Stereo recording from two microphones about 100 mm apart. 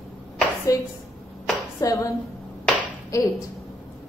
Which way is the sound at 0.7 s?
30° left (ahead or behind).